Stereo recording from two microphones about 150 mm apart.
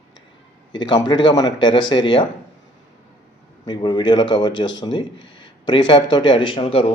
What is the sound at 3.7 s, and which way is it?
Speech, 30° left (ahead or behind).